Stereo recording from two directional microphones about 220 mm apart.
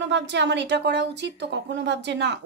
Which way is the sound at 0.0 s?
50° right (ahead or behind).